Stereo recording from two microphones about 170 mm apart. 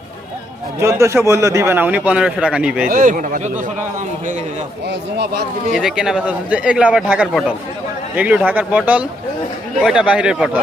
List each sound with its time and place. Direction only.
0.8 s speech: 15° right (ahead or behind)
2.9 s speech: 50° right (ahead or behind)
5.1 s speech: 75° right (ahead or behind)
5.7 s speech: 5° right (ahead or behind)